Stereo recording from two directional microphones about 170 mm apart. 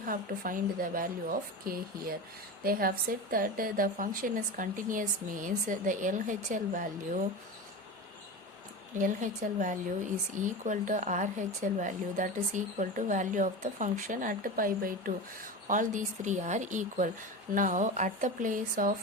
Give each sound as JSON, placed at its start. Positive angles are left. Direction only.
{"t": 0.0, "sound": "a woman's voice", "side_deg": -55}
{"t": 9.0, "sound": "speech", "side_deg": -50}